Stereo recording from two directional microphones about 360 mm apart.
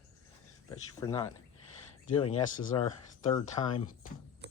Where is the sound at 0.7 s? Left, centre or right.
Centre.